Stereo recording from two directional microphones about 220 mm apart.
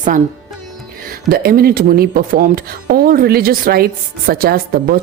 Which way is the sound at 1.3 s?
40° right (ahead or behind).